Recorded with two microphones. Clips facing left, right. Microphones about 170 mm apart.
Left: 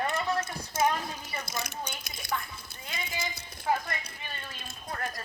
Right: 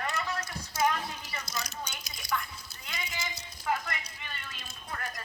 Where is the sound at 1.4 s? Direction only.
55° left (ahead or behind).